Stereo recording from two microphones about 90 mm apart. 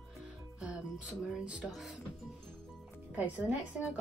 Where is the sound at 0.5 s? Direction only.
10° right (ahead or behind).